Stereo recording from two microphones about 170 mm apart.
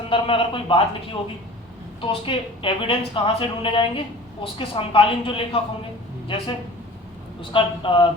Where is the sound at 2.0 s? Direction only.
30° left (ahead or behind).